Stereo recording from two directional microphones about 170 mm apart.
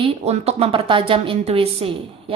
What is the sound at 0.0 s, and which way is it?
A woman's voice, 35° right (ahead or behind).